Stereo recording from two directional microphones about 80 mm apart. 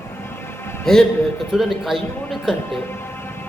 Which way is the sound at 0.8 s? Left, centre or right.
Centre.